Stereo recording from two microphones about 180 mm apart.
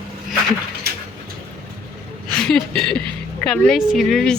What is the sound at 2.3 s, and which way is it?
Speech, centre (ahead or behind).